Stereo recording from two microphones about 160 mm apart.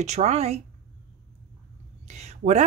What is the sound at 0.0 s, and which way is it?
Speech, 45° right (ahead or behind).